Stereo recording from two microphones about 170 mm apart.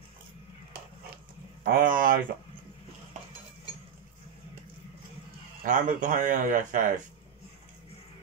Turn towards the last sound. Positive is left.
turn(degrees=-50)  # may be behind; listen again after turning